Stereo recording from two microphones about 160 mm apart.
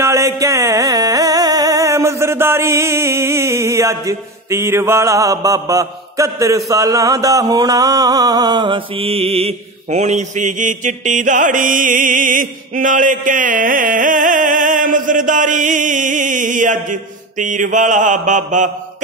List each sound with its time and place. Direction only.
0.0 s music: 20° right (ahead or behind); by 18.7 s 50° right (ahead or behind)